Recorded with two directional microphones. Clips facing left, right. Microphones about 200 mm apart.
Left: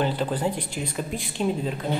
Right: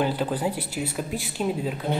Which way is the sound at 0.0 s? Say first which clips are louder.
Even; 10° right (ahead or behind).